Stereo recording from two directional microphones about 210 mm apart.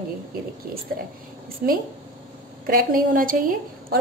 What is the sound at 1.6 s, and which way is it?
A woman's voice, 40° right (ahead or behind).